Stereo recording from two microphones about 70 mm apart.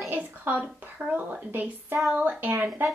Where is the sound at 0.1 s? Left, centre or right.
Right.